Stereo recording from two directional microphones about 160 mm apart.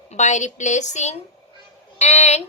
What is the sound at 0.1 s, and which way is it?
A woman's voice, 50° left (ahead or behind).